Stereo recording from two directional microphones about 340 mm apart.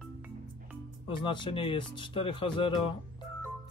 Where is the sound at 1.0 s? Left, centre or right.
Centre.